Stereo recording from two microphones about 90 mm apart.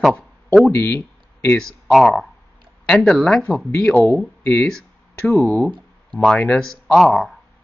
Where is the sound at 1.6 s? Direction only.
5° left (ahead or behind).